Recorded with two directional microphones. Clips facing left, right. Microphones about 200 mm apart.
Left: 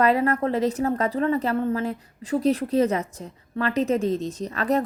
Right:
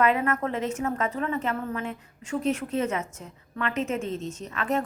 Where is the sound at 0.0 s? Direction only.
35° left (ahead or behind).